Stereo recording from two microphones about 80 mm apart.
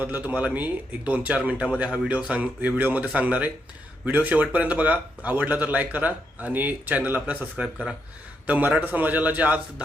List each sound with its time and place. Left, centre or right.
0.0 s a man's voice: right
8.4 s a man's voice: centre